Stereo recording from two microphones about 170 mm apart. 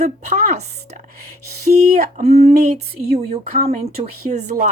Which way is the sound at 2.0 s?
40° right (ahead or behind).